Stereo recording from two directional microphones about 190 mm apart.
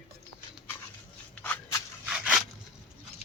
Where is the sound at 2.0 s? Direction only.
5° right (ahead or behind).